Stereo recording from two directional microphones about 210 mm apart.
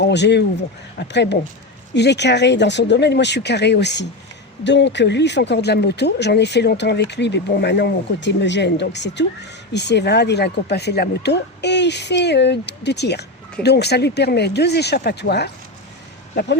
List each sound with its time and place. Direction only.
0.0 s speech: 55° left (ahead or behind)